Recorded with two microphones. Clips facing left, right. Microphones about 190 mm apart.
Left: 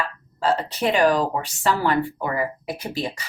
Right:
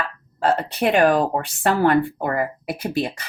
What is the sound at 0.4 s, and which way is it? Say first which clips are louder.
A woman's voice: right 2 dB; 55° right (ahead or behind).